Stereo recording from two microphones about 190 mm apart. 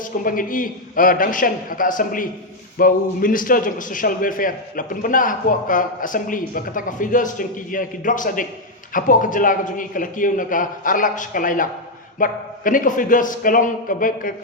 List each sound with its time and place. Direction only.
0.0 s a man's voice: 45° left (ahead or behind)